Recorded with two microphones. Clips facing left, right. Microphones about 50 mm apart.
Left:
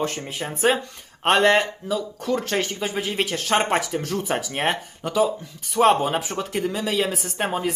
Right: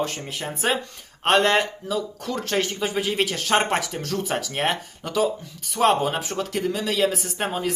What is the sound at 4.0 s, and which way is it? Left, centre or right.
Speech, centre.